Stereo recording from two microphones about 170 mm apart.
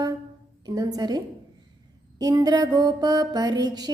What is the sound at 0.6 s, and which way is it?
Speech, 25° right (ahead or behind).